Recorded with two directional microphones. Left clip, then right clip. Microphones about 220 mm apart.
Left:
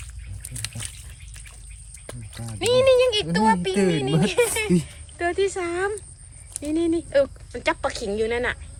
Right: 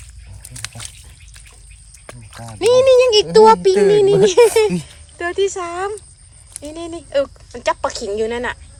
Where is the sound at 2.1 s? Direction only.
20° right (ahead or behind).